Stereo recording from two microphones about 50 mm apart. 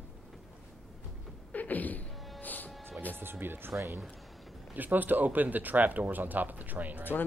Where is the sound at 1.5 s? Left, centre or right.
Left.